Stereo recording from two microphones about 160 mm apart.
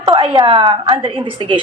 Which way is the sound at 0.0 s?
25° right (ahead or behind).